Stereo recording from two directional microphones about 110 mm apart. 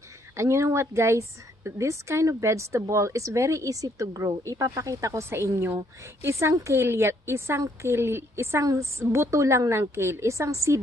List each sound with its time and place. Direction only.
0.4 s a woman's voice: 25° right (ahead or behind)